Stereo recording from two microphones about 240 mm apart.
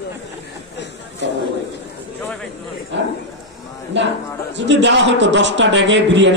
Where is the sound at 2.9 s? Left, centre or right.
Right.